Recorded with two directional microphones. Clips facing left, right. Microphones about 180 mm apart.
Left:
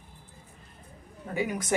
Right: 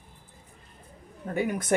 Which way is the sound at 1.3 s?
55° right (ahead or behind).